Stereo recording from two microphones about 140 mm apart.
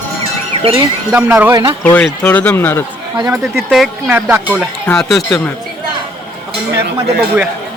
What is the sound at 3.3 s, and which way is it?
Speech, centre (ahead or behind).